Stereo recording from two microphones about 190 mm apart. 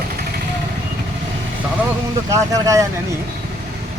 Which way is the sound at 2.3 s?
15° right (ahead or behind).